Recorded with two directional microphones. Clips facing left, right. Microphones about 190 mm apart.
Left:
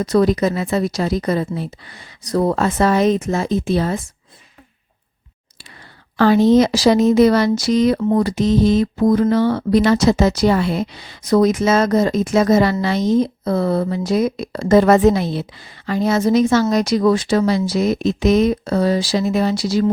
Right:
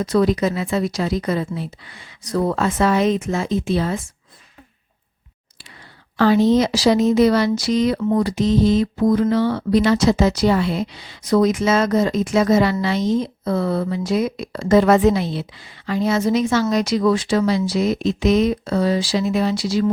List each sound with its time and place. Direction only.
0.0 s speech: 40° left (ahead or behind)
6.1 s speech: 50° left (ahead or behind)